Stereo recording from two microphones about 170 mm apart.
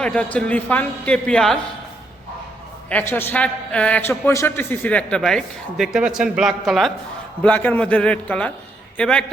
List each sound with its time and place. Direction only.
0.0 s a man's voice: 5° left (ahead or behind)
2.9 s a man's voice: 15° left (ahead or behind)